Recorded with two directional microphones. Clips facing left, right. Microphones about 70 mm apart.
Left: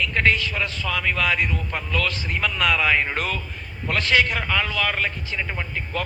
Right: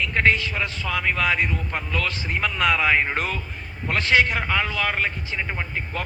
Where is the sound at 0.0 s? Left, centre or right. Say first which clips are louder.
Even; right.